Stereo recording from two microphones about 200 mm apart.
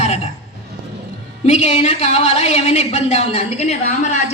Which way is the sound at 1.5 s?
30° left (ahead or behind).